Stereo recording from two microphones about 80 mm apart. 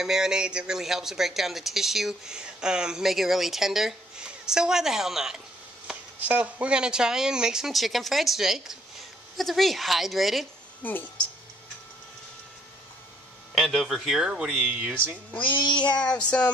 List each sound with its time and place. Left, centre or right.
0.0 s speech: centre
5.9 s speech: centre
10.8 s speech: left
13.6 s speech: centre
15.4 s child singing: left
16.0 s a sound: centre